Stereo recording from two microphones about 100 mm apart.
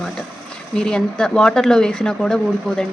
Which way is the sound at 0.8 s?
10° left (ahead or behind).